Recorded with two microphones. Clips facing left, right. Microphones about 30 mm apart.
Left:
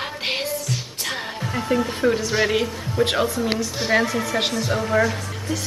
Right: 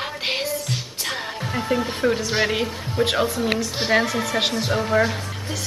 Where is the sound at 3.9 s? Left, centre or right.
Centre.